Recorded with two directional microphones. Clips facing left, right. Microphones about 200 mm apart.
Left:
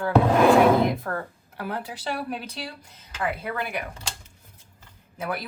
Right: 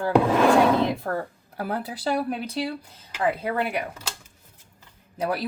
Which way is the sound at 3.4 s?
35° right (ahead or behind).